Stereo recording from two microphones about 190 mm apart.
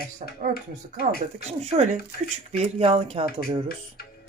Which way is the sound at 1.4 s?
35° right (ahead or behind).